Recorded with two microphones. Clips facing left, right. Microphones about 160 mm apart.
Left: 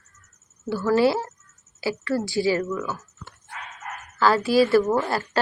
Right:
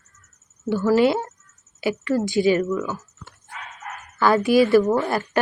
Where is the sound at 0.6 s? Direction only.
20° right (ahead or behind).